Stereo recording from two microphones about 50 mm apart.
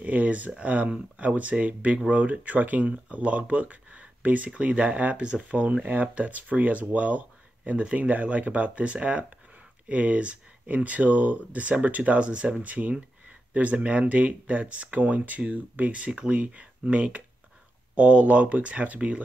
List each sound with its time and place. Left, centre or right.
0.0 s speech: right